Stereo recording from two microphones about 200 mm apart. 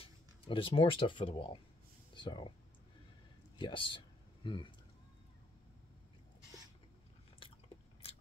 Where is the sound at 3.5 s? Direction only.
25° left (ahead or behind).